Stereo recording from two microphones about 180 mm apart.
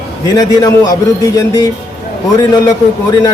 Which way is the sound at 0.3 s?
20° left (ahead or behind).